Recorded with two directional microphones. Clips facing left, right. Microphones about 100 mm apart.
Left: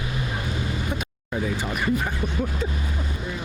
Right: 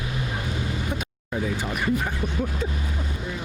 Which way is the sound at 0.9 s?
30° left (ahead or behind).